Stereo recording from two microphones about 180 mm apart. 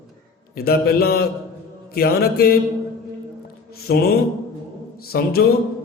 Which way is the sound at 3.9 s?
65° left (ahead or behind).